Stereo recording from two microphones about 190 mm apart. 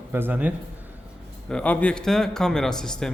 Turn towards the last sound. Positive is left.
turn(degrees=5)  # may be behind; listen again after turning